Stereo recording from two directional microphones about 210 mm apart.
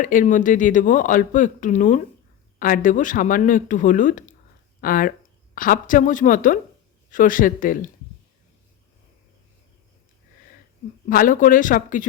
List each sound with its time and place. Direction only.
0.0 s speech: 40° left (ahead or behind)
11.1 s speech: 40° left (ahead or behind)